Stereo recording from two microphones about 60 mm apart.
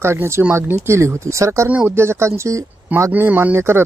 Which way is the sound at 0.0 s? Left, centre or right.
Right.